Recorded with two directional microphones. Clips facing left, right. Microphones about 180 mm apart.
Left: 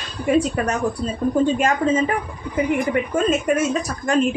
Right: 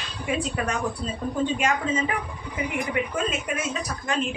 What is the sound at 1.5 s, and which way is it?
Speech, 45° left (ahead or behind).